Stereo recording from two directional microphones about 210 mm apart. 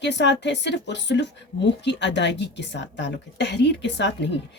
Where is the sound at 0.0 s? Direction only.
55° left (ahead or behind).